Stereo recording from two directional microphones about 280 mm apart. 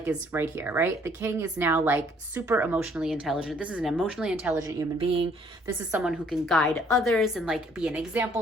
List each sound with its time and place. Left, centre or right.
0.0 s speech: centre
4.9 s speech: centre
5.9 s a woman's voice: centre